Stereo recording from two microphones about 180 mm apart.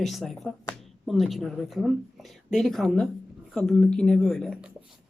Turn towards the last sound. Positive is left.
turn(degrees=-5)  # may be behind; listen again after turning